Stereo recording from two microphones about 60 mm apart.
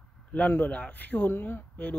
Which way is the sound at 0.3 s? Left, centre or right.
Left.